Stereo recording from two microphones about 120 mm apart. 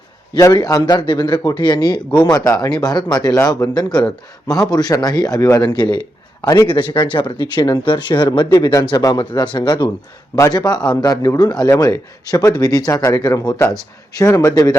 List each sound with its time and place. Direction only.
0.3 s speech: 30° left (ahead or behind)
5.6 s a man's voice: 40° left (ahead or behind)